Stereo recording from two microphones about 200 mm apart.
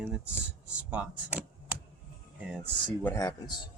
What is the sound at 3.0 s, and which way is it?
Speech, 15° left (ahead or behind).